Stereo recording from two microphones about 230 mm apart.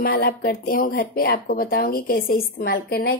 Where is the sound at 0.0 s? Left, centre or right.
Left.